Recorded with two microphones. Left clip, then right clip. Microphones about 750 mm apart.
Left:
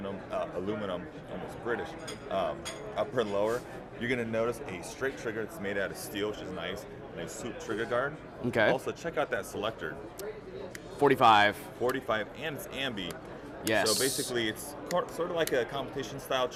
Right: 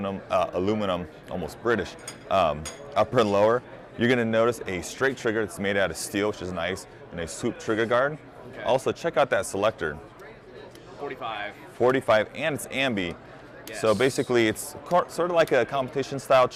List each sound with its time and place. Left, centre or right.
0.0 s a sound: right
1.5 s speech: right
11.0 s speech: left
11.8 s speech: right